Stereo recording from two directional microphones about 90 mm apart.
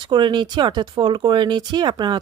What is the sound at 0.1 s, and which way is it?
Speech, 60° right (ahead or behind).